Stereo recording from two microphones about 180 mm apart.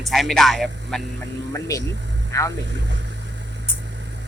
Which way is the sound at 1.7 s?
20° left (ahead or behind).